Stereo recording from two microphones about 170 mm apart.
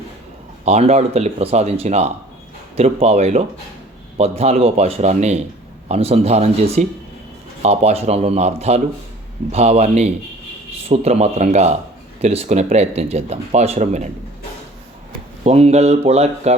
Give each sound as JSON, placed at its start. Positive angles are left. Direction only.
{"t": 0.6, "sound": "speech", "side_deg": -40}
{"t": 15.4, "sound": "speech", "side_deg": -40}